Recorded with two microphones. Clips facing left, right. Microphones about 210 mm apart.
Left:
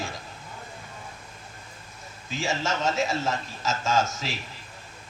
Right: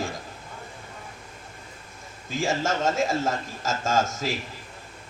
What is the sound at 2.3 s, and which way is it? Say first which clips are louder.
A man's voice: right 3 dB; 50° right (ahead or behind).